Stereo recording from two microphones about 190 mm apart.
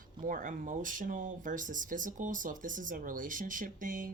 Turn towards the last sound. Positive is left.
turn(degrees=-45)  # may be behind; listen again after turning